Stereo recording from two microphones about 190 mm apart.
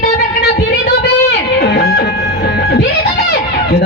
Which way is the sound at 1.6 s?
60° left (ahead or behind).